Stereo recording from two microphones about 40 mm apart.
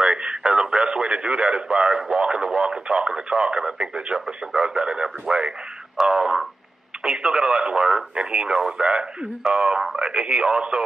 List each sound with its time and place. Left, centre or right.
0.0 s radio: centre
2.1 s speech: centre
9.5 s speech: right